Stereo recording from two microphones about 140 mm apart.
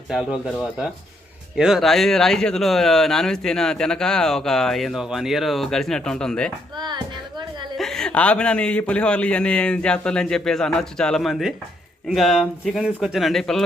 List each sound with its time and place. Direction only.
0.1 s speech: centre (ahead or behind)
1.5 s speech: 5° right (ahead or behind)
6.7 s music: 35° right (ahead or behind)
7.8 s a man's voice: 5° left (ahead or behind)